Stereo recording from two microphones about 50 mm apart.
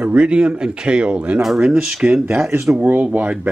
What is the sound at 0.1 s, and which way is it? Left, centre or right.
Speech, right.